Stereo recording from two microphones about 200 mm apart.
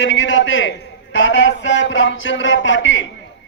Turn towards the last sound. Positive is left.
turn(degrees=70)  # may be behind; listen again after turning